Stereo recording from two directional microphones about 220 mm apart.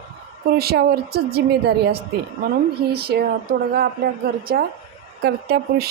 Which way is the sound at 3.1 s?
45° right (ahead or behind).